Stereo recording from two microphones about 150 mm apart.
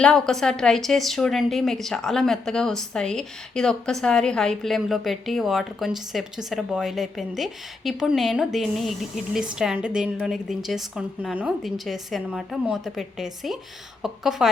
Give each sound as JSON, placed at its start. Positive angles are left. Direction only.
{"t": 0.0, "sound": "a woman's voice", "side_deg": 5}